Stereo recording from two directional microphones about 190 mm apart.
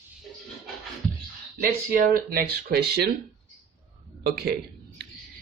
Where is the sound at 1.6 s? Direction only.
50° right (ahead or behind).